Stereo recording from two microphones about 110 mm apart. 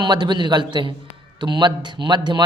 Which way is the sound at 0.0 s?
45° right (ahead or behind).